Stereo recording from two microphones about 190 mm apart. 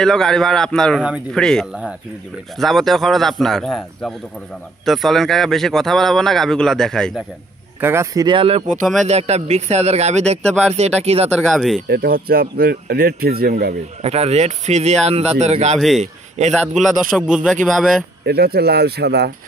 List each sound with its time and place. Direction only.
0.0 s speech: 5° left (ahead or behind)
7.8 s a man's voice: 15° right (ahead or behind); by 11.3 s 35° right (ahead or behind)
11.5 s speech: centre (ahead or behind)
11.9 s speech: 55° right (ahead or behind)
14.0 s a man's voice: 35° right (ahead or behind)
17.3 s speech: centre (ahead or behind)
18.2 s speech: 55° right (ahead or behind)